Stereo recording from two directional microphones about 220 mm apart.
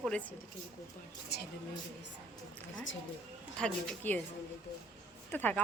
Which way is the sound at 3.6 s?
5° left (ahead or behind).